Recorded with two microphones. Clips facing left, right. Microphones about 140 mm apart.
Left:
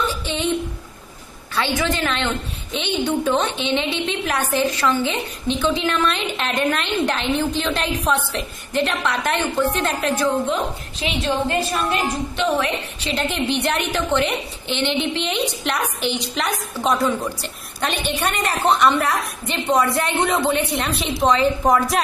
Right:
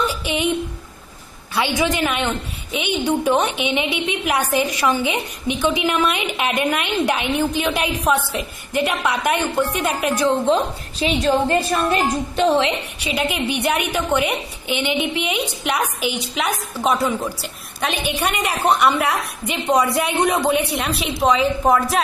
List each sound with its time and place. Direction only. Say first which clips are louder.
0.0 s a sound: right 2 dB; 10° right (ahead or behind)
1.5 s a woman's voice: right 2 dB; 15° right (ahead or behind)
11.9 s a woman's voice: right 3 dB; 40° right (ahead or behind)
13.0 s a woman's voice: right 1 dB; 10° right (ahead or behind)